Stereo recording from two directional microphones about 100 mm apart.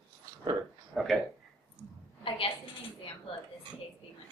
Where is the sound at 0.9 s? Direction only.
Centre (ahead or behind).